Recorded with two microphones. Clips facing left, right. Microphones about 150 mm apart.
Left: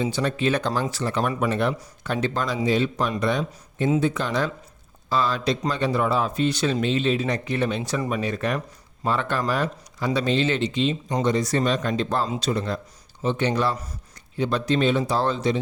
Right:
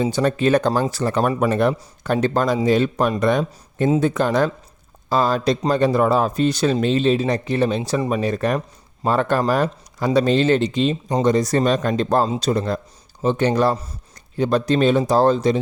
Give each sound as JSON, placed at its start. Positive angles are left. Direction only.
{"t": 0.0, "sound": "speech", "side_deg": -45}